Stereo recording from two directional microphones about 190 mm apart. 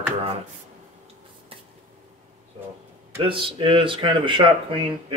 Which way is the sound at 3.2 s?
25° right (ahead or behind).